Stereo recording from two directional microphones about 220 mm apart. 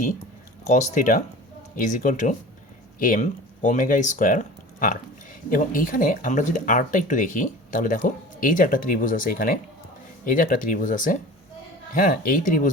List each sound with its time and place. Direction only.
0.7 s speech: 35° left (ahead or behind)
5.5 s speech: 40° left (ahead or behind)